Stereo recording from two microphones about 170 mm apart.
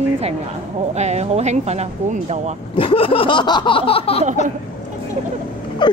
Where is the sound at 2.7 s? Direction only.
30° left (ahead or behind).